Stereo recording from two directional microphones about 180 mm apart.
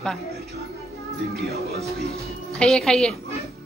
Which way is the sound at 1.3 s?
60° right (ahead or behind).